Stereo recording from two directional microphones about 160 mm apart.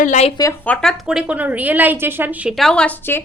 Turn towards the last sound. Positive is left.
turn(degrees=10)  # may be behind; listen again after turning